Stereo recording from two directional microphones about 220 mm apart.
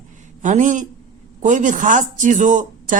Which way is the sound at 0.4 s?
35° right (ahead or behind).